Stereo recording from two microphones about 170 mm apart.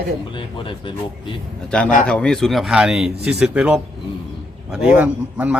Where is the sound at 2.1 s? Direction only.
5° left (ahead or behind).